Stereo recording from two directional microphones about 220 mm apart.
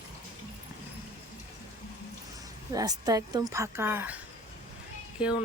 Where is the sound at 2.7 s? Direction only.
15° right (ahead or behind).